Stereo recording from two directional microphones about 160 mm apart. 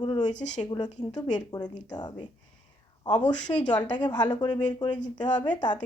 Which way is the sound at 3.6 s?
25° left (ahead or behind).